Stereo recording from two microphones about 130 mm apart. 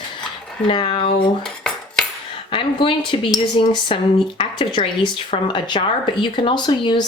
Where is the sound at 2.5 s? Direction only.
40° left (ahead or behind).